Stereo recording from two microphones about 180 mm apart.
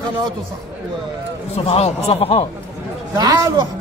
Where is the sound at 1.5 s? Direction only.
35° left (ahead or behind).